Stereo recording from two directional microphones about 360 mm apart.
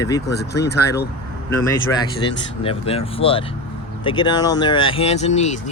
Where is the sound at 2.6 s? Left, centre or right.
Centre.